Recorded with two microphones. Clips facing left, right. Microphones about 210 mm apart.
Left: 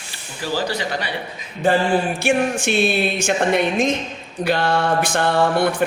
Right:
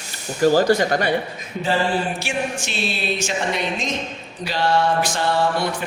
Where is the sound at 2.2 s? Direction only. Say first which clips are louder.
Left 7 dB; 55° left (ahead or behind).